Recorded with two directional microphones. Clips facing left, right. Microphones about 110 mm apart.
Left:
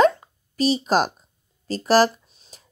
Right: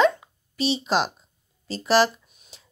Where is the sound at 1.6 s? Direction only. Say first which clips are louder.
Left 3 dB; 45° left (ahead or behind).